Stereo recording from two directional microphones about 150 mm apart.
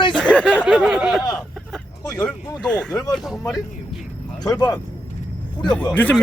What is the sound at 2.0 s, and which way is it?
Speech, 25° left (ahead or behind).